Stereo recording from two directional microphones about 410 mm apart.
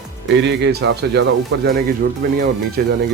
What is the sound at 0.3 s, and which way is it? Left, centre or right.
Speech, right.